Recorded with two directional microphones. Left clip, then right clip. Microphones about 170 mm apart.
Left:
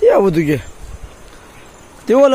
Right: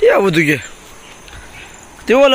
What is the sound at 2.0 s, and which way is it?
Speech, 20° left (ahead or behind).